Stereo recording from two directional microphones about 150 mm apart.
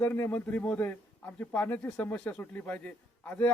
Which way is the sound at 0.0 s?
15° left (ahead or behind).